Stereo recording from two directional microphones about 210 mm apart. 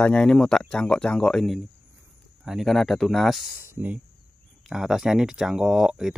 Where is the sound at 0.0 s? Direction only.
5° left (ahead or behind).